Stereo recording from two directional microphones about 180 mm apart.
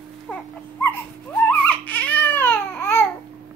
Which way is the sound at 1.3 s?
10° left (ahead or behind).